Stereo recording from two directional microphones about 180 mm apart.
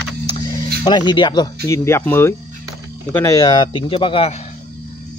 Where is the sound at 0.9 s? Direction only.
25° left (ahead or behind).